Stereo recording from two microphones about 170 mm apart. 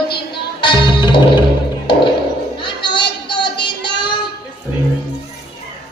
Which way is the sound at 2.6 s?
25° left (ahead or behind).